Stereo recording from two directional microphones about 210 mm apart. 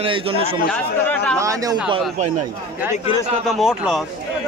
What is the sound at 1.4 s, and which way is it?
Speech, 15° right (ahead or behind).